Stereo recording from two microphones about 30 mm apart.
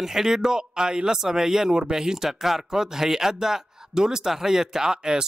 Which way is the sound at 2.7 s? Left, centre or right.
Centre.